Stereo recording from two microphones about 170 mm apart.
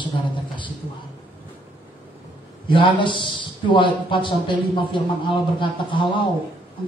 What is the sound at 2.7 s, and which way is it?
A man's voice, 30° left (ahead or behind).